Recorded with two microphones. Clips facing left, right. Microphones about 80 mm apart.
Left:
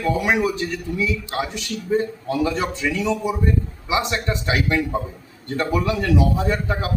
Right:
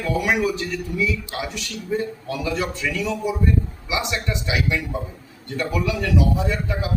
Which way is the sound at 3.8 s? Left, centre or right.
Left.